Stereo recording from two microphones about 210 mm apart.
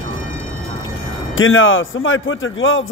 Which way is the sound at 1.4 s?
70° left (ahead or behind).